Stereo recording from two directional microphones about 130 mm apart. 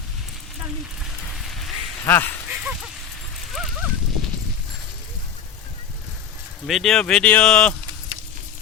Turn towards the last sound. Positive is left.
turn(degrees=10)  # may be behind; listen again after turning